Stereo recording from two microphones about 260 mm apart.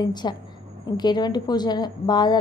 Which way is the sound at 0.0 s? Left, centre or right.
Centre.